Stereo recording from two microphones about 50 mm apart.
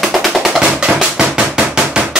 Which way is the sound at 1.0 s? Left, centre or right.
Centre.